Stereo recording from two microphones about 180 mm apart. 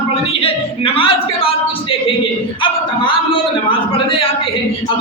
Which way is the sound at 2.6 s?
30° left (ahead or behind).